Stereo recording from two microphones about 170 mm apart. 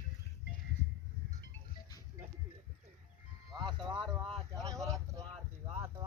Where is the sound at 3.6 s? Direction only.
25° right (ahead or behind).